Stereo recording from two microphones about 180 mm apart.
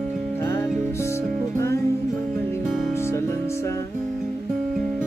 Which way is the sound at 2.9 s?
15° left (ahead or behind).